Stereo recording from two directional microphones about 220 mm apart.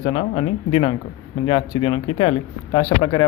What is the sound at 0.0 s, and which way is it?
A man's voice, 20° left (ahead or behind).